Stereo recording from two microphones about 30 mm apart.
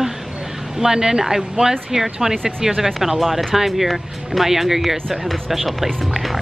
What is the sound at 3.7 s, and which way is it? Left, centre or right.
A woman's voice, centre.